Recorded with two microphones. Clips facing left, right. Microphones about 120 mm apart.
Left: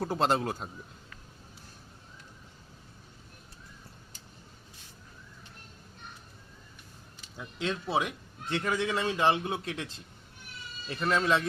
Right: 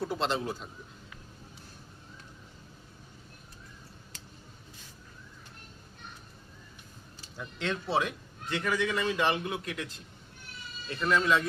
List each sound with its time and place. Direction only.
0.0 s a man's voice: 45° left (ahead or behind)
7.3 s speech: 15° left (ahead or behind)
8.6 s a man's voice: 25° left (ahead or behind)